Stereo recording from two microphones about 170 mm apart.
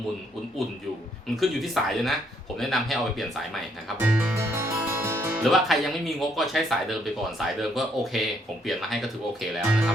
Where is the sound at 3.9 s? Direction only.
10° right (ahead or behind).